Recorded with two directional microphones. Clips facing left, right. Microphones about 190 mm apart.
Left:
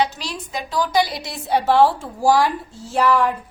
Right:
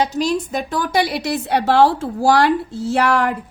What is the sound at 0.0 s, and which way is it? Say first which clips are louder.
A woman's voice: right 5 dB; 45° right (ahead or behind).